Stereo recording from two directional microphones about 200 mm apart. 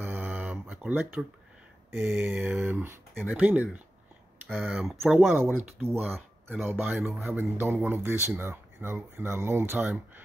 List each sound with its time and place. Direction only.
0.0 s a sound: 10° right (ahead or behind)
1.9 s a man's voice: 10° right (ahead or behind)
3.2 s speech: centre (ahead or behind)
4.5 s a man's voice: centre (ahead or behind)